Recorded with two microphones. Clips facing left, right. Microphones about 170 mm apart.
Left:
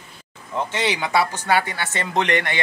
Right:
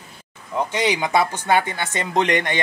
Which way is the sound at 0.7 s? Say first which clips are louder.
Right 2 dB; 15° right (ahead or behind).